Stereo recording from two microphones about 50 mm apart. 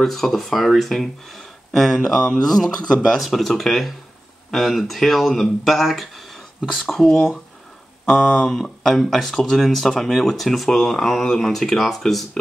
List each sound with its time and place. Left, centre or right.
0.0 s speech: centre